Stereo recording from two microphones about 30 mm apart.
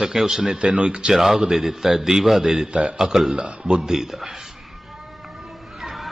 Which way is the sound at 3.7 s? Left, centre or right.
Right.